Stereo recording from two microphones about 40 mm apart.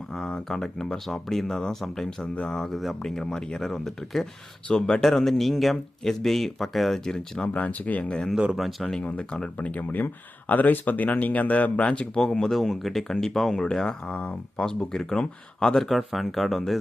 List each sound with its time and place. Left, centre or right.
0.1 s speech: left
0.4 s speech: centre
2.2 s speech: left
2.5 s speech: centre
5.0 s speech: centre
7.4 s speech: left
8.0 s speech: left
8.5 s speech: centre
9.6 s speech: left
11.8 s speech: left
12.2 s speech: centre
12.5 s speech: centre
14.0 s speech: left
14.6 s speech: centre